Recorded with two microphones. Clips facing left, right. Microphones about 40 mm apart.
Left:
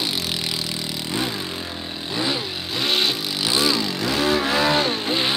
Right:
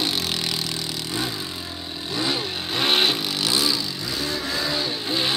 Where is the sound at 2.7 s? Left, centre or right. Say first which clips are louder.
Right 1 dB; centre.